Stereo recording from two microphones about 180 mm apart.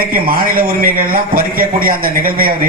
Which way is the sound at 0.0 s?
55° right (ahead or behind).